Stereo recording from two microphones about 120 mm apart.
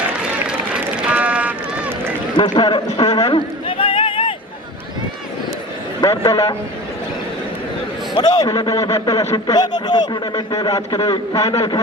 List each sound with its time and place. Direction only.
0.2 s run: 10° right (ahead or behind)
2.4 s a sound: 40° left (ahead or behind)
6.0 s a man's voice: 30° left (ahead or behind)
8.1 s a man's voice: 35° left (ahead or behind)